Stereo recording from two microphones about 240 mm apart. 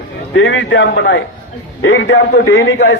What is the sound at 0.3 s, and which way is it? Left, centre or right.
A man's voice, left.